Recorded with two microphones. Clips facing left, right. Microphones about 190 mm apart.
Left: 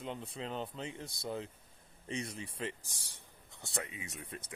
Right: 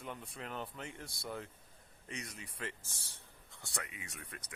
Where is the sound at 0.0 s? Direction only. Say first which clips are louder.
Left 4 dB; 25° left (ahead or behind).